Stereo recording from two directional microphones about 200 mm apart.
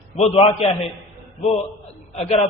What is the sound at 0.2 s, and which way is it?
Speech, 30° left (ahead or behind).